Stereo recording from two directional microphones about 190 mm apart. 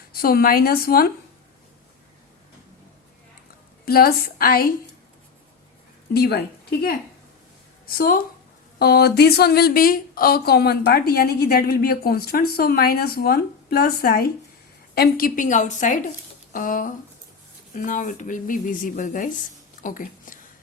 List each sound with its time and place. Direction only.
0.1 s speech: 50° left (ahead or behind)
3.8 s speech: 55° left (ahead or behind)
6.1 s a woman's voice: 55° left (ahead or behind)
19.8 s a sound: 45° left (ahead or behind)